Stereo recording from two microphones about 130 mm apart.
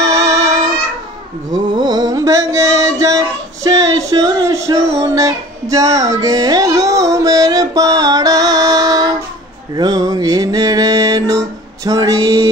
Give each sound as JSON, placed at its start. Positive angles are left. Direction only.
{"t": 0.0, "sound": "music", "side_deg": -25}
{"t": 1.8, "sound": "music", "side_deg": -35}
{"t": 9.8, "sound": "mantra", "side_deg": -30}